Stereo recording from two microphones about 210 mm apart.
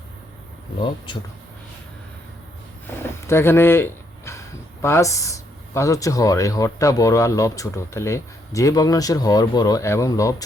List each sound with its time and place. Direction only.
0.8 s speech: 20° left (ahead or behind)
2.8 s speech: 10° left (ahead or behind)